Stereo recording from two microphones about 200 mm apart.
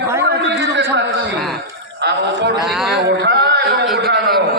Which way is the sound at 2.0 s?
55° right (ahead or behind).